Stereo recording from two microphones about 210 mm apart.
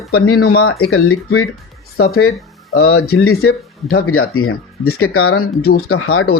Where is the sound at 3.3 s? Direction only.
90° left.